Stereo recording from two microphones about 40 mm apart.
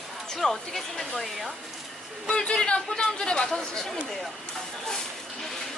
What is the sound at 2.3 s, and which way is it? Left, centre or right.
Speech, left.